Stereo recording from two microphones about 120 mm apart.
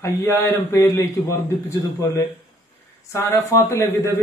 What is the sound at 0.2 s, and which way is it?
A man's voice, 20° left (ahead or behind).